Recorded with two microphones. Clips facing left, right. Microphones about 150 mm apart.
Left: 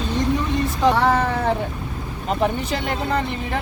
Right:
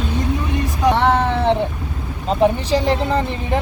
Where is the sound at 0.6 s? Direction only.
15° right (ahead or behind).